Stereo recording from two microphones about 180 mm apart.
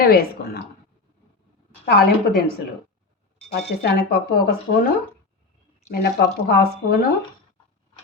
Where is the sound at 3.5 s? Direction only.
65° left (ahead or behind).